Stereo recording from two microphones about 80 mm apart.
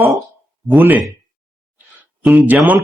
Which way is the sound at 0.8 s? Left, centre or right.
Right.